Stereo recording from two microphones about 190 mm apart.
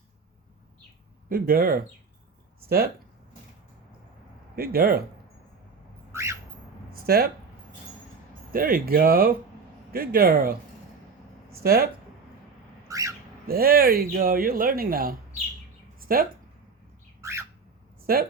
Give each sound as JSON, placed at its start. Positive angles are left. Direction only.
{"t": 1.3, "sound": "speech", "side_deg": -50}
{"t": 4.5, "sound": "speech", "side_deg": -50}
{"t": 6.1, "sound": "squawk", "side_deg": -15}
{"t": 6.9, "sound": "a sound", "side_deg": -55}
{"t": 8.5, "sound": "speech", "side_deg": -50}
{"t": 11.6, "sound": "speech", "side_deg": -55}
{"t": 12.9, "sound": "bird", "side_deg": -15}
{"t": 13.5, "sound": "speech", "side_deg": -55}
{"t": 16.0, "sound": "a sound", "side_deg": -50}
{"t": 17.2, "sound": "squawk", "side_deg": -15}
{"t": 18.0, "sound": "a woman's voice", "side_deg": -50}